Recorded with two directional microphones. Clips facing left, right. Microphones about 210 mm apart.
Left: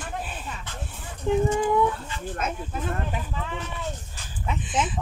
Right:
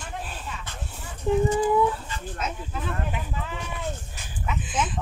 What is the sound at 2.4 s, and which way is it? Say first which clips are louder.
Speech: left 2 dB; 50° left (ahead or behind).